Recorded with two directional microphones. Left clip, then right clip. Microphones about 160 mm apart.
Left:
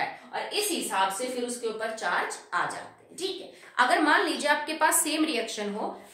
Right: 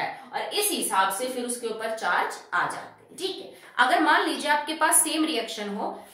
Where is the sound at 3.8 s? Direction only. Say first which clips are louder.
Right 2 dB; 25° left (ahead or behind).